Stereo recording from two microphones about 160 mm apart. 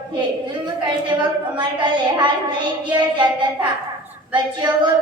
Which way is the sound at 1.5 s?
30° right (ahead or behind).